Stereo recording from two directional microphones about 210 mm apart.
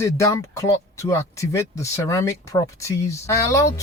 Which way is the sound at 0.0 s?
15° left (ahead or behind).